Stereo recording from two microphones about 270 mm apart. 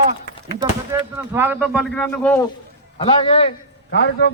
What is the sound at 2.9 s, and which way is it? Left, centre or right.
Speech, centre.